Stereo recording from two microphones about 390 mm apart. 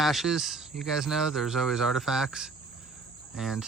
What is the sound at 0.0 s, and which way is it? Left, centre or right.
Speech, centre.